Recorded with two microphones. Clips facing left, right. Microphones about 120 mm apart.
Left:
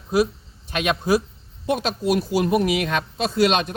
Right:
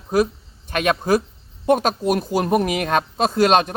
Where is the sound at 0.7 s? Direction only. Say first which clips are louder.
Right 2 dB; 50° right (ahead or behind).